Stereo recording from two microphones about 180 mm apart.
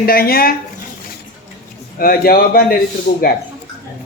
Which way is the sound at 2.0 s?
55° left (ahead or behind).